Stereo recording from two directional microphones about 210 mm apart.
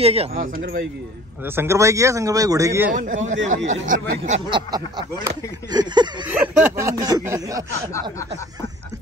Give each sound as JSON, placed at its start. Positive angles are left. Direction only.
{"t": 0.0, "sound": "speech", "side_deg": -30}
{"t": 1.4, "sound": "speech", "side_deg": -10}
{"t": 2.9, "sound": "speech", "side_deg": -35}
{"t": 4.2, "sound": "speech", "side_deg": -25}
{"t": 6.2, "sound": "speech", "side_deg": -10}